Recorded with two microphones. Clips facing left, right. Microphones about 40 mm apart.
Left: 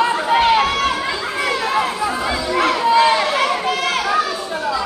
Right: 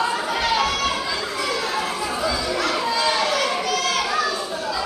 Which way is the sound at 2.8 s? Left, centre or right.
Left.